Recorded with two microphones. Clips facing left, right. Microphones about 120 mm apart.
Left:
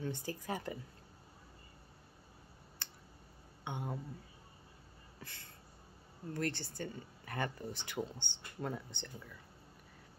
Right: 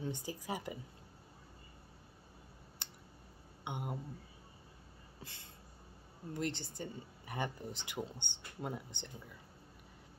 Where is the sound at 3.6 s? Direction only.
15° right (ahead or behind).